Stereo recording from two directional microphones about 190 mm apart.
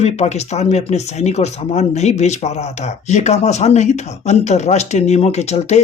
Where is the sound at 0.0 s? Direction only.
35° left (ahead or behind).